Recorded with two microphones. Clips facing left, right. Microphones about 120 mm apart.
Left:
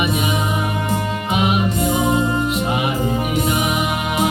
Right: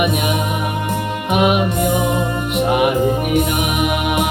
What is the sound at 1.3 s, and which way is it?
Music, 60° right (ahead or behind).